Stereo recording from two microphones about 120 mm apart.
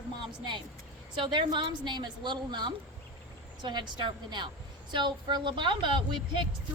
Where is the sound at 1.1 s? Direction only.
40° right (ahead or behind).